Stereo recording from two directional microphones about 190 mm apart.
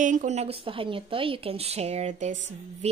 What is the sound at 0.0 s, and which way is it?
A woman's voice, 40° right (ahead or behind).